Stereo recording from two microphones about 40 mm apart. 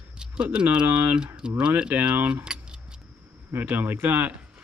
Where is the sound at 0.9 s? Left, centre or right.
Right.